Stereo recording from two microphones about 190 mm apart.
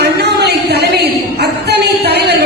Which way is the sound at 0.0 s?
60° right (ahead or behind).